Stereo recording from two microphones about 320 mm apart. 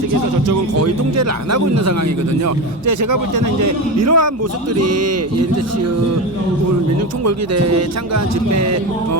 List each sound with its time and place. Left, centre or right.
0.8 s a man's voice: right
7.3 s speech: right